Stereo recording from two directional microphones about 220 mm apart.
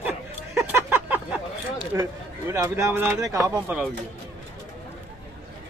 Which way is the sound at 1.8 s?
15° right (ahead or behind).